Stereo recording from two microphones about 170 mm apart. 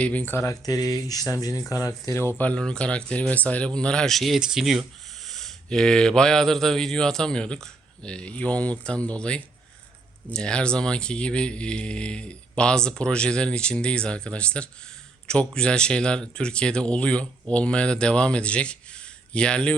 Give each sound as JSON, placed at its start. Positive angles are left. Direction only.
{"t": 0.0, "sound": "speech", "side_deg": 10}